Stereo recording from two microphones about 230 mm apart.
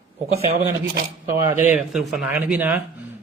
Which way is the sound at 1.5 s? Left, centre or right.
Centre.